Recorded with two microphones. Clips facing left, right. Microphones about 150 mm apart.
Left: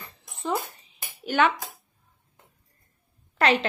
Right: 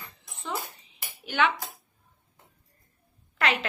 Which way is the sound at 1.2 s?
45° left (ahead or behind).